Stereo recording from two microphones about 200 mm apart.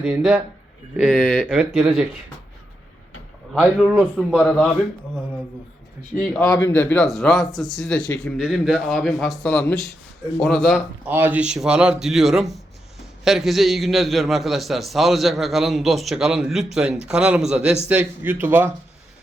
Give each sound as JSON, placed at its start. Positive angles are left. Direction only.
{"t": 0.0, "sound": "a man's voice", "side_deg": 0}
{"t": 3.6, "sound": "a man's voice", "side_deg": -5}
{"t": 6.1, "sound": "a man's voice", "side_deg": 0}